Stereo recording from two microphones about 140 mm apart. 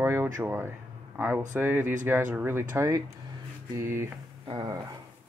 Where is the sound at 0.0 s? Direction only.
20° right (ahead or behind).